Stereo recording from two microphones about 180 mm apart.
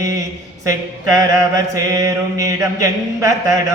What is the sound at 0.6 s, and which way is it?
Mantra, 20° right (ahead or behind).